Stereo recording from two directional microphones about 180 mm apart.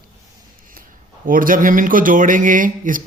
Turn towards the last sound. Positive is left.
turn(degrees=-50)  # may be behind; listen again after turning